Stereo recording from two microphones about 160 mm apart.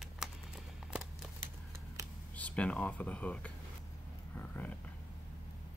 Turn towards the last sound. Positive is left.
turn(degrees=10)  # may be behind; listen again after turning